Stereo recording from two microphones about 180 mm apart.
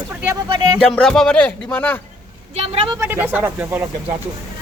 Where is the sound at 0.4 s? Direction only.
25° right (ahead or behind).